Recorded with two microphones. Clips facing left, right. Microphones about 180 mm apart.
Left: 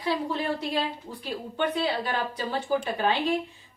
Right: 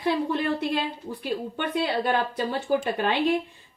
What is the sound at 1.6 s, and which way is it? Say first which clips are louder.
A woman's voice: left 1 dB; 55° right (ahead or behind).